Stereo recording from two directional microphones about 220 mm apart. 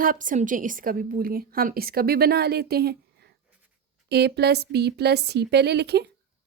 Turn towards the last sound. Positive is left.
turn(degrees=-50)  # may be behind; listen again after turning